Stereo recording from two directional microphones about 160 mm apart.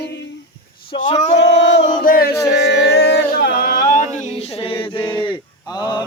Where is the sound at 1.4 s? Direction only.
90° left.